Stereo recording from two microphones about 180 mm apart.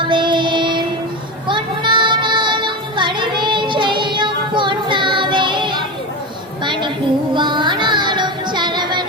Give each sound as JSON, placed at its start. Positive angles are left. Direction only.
{"t": 0.0, "sound": "child singing", "side_deg": -25}
{"t": 1.5, "sound": "music", "side_deg": -25}
{"t": 6.7, "sound": "a sound", "side_deg": -25}
{"t": 7.3, "sound": "child singing", "side_deg": -25}